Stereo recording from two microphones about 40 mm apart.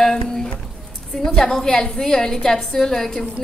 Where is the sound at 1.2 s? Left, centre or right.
Centre.